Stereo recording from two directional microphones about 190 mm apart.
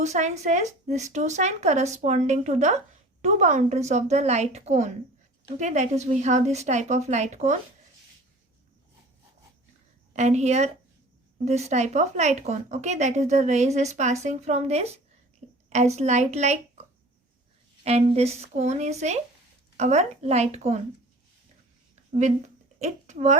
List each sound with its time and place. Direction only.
0.0 s speech: 35° right (ahead or behind)
10.1 s a woman's voice: 35° right (ahead or behind)
16.0 s speech: 35° right (ahead or behind)
17.8 s speech: 35° right (ahead or behind)
22.2 s speech: 40° right (ahead or behind)